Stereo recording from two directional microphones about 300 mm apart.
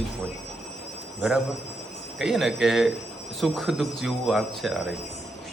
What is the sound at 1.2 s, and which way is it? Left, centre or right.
A man's voice, centre.